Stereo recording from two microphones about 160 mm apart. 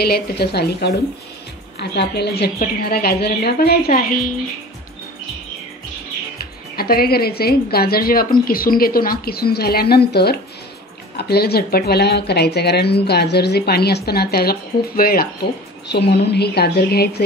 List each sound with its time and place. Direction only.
0.0 s speech: 85° left
2.6 s speech: 70° left (ahead or behind)
6.3 s speech: 70° left (ahead or behind)
15.9 s speech: 90° left